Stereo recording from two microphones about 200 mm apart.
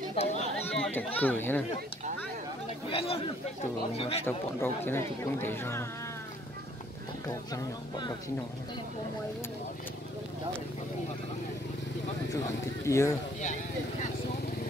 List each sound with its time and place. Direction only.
0.1 s speech: 30° left (ahead or behind)
0.8 s speech: 10° left (ahead or behind)
2.9 s speech: 30° left (ahead or behind)
4.2 s speech: 10° left (ahead or behind)
7.2 s speech: 15° left (ahead or behind)
12.8 s speech: 15° left (ahead or behind)